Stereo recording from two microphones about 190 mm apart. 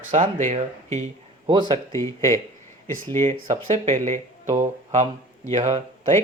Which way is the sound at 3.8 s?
35° right (ahead or behind).